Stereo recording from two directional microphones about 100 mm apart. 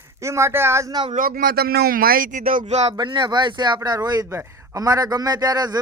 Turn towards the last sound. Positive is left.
turn(degrees=-40)  # may be behind; listen again after turning